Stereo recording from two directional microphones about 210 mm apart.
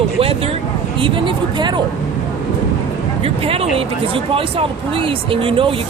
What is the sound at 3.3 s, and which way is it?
Speech, 30° right (ahead or behind).